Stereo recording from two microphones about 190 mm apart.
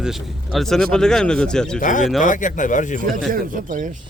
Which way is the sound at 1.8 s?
40° left (ahead or behind).